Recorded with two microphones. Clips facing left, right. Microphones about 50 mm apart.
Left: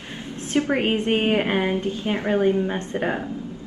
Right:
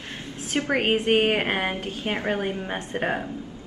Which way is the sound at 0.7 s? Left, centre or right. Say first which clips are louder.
Right 3 dB; right.